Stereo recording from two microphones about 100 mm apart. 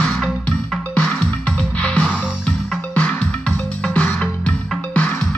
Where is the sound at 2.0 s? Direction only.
10° right (ahead or behind).